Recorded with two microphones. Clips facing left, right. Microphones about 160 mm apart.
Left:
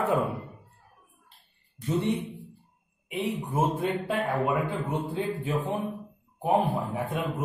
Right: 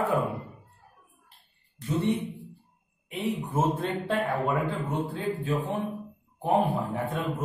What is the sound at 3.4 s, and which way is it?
Speech, 10° left (ahead or behind).